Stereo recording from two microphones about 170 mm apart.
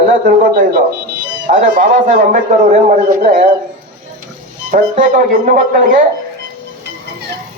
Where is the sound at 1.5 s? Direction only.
50° right (ahead or behind).